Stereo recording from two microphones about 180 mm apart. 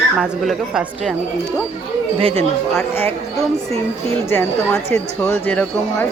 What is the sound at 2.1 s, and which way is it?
Speech, 30° right (ahead or behind).